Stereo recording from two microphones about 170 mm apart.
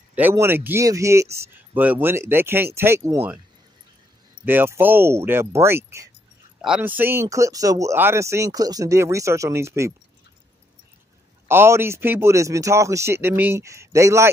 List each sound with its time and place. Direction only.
0.1 s speech: 10° right (ahead or behind)
4.5 s speech: 10° right (ahead or behind)
11.4 s speech: 15° right (ahead or behind)